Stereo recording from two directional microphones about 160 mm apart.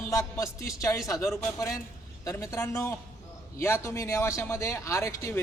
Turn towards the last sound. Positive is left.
turn(degrees=20)  # may be behind; listen again after turning